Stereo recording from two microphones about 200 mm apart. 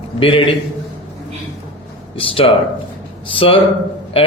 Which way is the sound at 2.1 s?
25° left (ahead or behind).